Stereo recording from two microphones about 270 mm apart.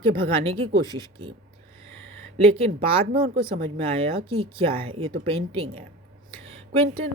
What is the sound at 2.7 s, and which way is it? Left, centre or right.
Speech, right.